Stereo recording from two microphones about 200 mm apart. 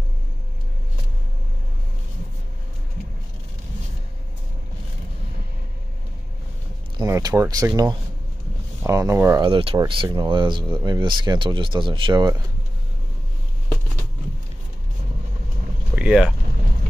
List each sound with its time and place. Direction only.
7.0 s speech: 20° right (ahead or behind)
9.5 s speech: 25° right (ahead or behind)
15.9 s vehicle: 5° right (ahead or behind)